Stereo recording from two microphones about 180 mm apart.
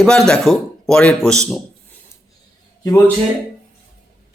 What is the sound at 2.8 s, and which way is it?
Speech, 15° left (ahead or behind).